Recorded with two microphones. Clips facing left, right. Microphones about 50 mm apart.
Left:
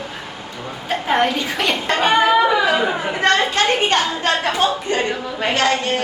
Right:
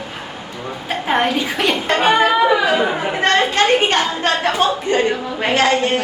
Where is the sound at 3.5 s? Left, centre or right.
Right.